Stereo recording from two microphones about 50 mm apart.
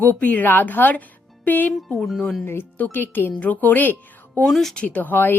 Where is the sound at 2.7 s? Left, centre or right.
Left.